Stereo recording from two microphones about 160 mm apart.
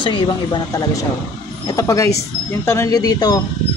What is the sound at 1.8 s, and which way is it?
Speech, 20° left (ahead or behind).